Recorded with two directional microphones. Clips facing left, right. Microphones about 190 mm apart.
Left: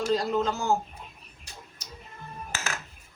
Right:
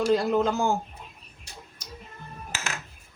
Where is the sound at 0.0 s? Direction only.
60° right (ahead or behind).